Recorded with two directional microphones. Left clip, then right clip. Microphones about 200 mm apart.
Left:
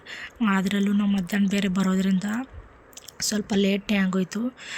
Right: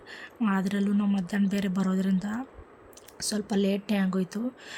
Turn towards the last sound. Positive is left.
turn(degrees=10)  # may be behind; listen again after turning